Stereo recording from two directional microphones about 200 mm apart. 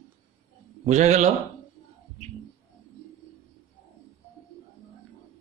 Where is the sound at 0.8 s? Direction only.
35° right (ahead or behind).